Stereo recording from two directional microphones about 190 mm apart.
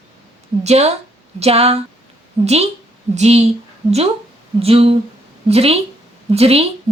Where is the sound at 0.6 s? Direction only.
35° right (ahead or behind).